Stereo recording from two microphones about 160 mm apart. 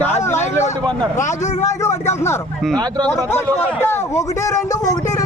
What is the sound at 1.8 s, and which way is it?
Speech, 15° left (ahead or behind).